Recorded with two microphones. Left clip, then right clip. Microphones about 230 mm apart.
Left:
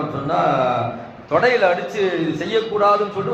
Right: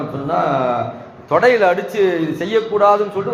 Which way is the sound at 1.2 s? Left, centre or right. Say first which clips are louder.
Right 3 dB; right.